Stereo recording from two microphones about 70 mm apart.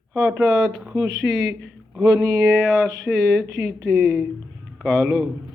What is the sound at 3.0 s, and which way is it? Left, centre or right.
Speech, centre.